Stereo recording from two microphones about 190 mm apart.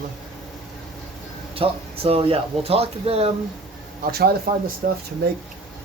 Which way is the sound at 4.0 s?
55° right (ahead or behind).